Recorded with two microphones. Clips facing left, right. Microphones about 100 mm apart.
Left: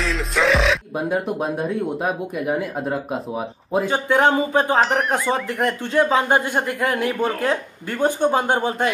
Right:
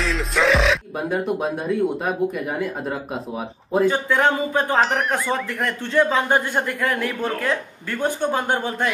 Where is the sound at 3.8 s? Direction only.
20° left (ahead or behind).